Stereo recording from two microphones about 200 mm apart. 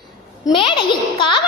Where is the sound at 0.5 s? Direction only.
25° left (ahead or behind).